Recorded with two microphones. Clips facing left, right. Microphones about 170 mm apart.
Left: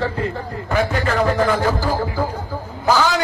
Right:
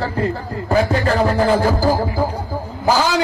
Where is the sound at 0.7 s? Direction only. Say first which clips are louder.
Right 3 dB; 35° right (ahead or behind).